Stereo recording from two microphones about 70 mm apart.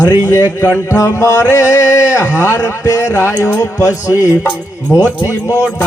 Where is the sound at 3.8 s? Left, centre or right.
Left.